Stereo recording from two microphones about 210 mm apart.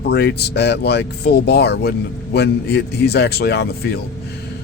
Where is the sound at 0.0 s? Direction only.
50° left (ahead or behind).